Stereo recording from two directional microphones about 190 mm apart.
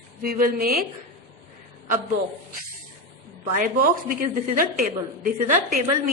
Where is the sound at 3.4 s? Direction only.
45° right (ahead or behind).